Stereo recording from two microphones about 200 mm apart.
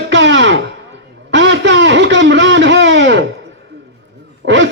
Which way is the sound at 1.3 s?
60° right (ahead or behind).